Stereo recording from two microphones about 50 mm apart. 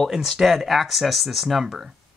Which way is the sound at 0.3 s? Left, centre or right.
Centre.